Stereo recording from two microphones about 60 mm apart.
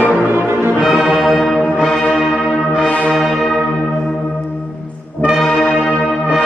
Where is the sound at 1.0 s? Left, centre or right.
Centre.